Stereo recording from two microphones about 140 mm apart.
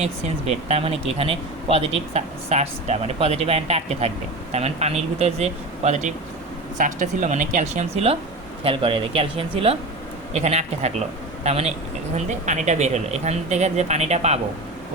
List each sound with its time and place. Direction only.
0.0 s speech: 50° right (ahead or behind)
6.7 s speech: 65° right (ahead or behind)